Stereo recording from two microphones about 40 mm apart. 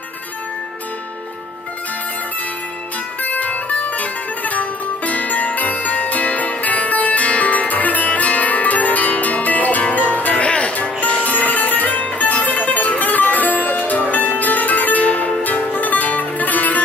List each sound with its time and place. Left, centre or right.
3.2 s music: left
11.3 s music: left